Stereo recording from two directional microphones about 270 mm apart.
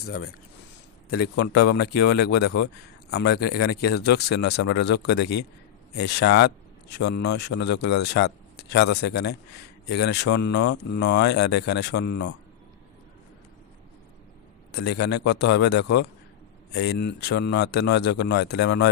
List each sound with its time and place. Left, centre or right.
0.0 s speech: left
1.2 s a man's voice: left
14.8 s a man's voice: left